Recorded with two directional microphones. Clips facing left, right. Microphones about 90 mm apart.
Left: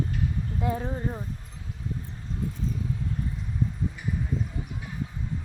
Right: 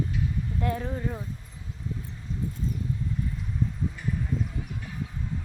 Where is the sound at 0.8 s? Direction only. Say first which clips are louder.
Left 1 dB; 30° left (ahead or behind).